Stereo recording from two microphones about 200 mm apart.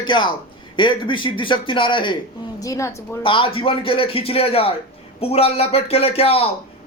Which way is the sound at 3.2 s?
25° left (ahead or behind).